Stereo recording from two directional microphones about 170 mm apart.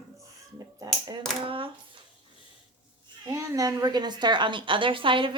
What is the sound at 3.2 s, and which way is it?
A woman's voice, 20° right (ahead or behind).